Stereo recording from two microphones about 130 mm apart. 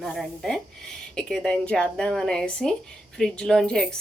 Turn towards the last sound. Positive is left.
turn(degrees=5)  # may be behind; listen again after turning